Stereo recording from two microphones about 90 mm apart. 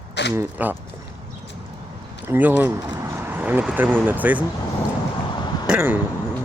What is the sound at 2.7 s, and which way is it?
Speech, 30° right (ahead or behind).